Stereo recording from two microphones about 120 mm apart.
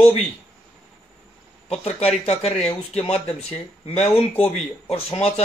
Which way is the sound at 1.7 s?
60° left (ahead or behind).